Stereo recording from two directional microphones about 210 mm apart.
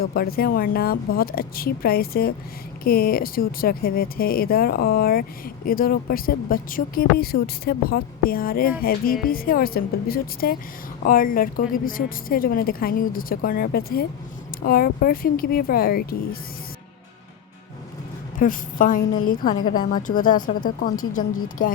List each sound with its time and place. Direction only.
0.0 s speech: 45° left (ahead or behind)
18.3 s a woman's voice: 40° left (ahead or behind)
20.9 s speech: 90° left